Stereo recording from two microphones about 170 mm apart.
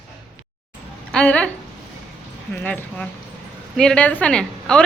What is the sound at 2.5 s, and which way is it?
Speech, 10° left (ahead or behind).